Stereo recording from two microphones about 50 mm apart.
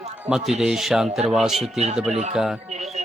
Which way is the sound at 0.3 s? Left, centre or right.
Centre.